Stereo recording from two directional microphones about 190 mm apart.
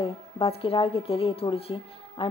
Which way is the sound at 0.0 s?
30° left (ahead or behind).